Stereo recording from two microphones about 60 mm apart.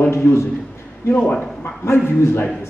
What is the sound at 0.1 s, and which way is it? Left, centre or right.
Speech, left.